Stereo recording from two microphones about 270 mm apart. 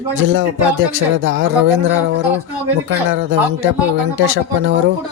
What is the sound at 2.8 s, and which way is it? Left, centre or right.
Speech, right.